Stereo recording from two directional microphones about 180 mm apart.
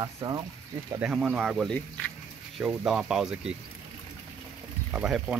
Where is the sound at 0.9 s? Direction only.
5° right (ahead or behind).